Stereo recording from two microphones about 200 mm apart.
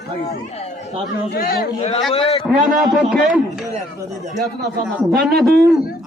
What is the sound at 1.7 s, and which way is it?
Speech, 30° left (ahead or behind).